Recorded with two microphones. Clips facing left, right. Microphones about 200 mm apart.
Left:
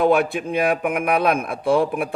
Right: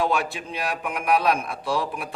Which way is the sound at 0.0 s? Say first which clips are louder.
Left 7 dB; 55° left (ahead or behind).